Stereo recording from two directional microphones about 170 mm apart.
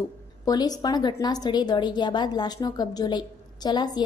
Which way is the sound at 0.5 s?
25° left (ahead or behind).